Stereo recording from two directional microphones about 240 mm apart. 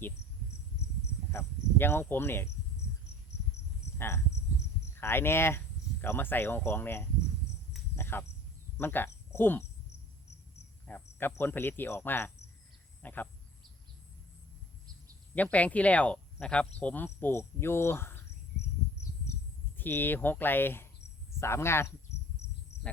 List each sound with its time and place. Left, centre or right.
1.3 s speech: centre
3.9 s speech: centre
10.8 s speech: centre
15.4 s speech: centre
19.7 s speech: centre
22.7 s bird: left